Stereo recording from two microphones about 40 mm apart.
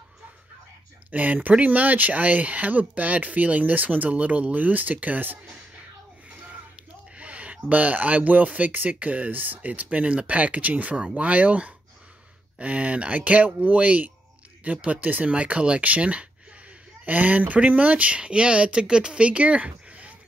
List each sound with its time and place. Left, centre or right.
1.1 s speech: right
7.2 s a sound: right
7.7 s speech: right
9.8 s speech: right
15.3 s speech: right
17.0 s speech: right